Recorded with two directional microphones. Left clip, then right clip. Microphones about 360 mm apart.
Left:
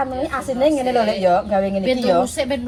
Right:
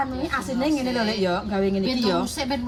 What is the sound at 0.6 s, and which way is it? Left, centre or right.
Speech, centre.